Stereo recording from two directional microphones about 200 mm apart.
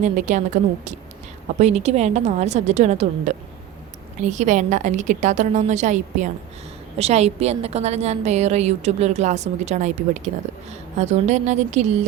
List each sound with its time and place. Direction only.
0.0 s a woman's voice: 35° right (ahead or behind)